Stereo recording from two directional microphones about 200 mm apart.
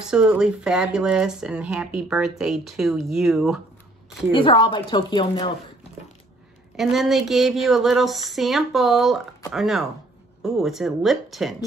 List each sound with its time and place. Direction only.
0.1 s speech: 5° right (ahead or behind)
4.3 s a woman's voice: 25° left (ahead or behind)
6.8 s speech: centre (ahead or behind)